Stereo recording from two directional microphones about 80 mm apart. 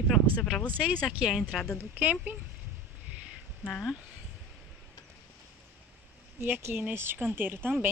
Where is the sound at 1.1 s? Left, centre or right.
Centre.